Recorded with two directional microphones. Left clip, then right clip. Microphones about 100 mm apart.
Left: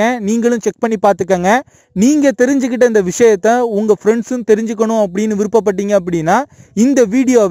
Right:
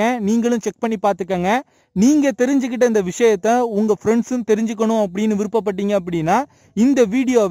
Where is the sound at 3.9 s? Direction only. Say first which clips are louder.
Left 5 dB; 25° left (ahead or behind).